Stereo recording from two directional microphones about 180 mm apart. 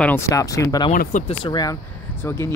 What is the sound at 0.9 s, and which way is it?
Speech, 45° left (ahead or behind).